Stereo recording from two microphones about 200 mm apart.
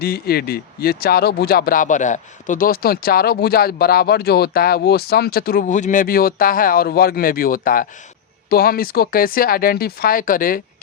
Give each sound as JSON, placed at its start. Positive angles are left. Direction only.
{"t": 0.0, "sound": "speech", "side_deg": 50}